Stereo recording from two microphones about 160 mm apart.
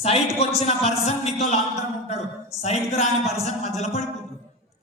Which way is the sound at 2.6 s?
45° left (ahead or behind).